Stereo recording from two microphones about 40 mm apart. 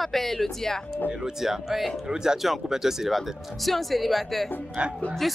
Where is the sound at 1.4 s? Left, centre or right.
Centre.